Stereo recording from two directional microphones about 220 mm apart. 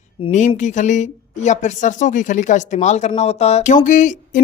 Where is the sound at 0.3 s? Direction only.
35° left (ahead or behind).